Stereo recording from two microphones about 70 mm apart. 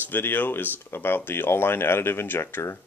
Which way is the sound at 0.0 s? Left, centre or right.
Left.